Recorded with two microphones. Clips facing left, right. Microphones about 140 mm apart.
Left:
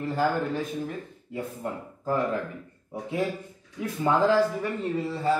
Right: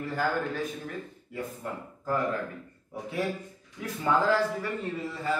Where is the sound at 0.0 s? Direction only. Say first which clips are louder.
Left 4 dB; 30° left (ahead or behind).